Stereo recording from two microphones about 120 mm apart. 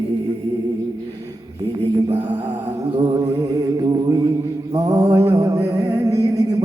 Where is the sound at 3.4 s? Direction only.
30° right (ahead or behind).